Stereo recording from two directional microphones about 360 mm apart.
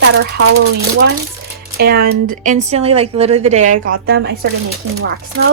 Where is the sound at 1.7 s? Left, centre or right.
Right.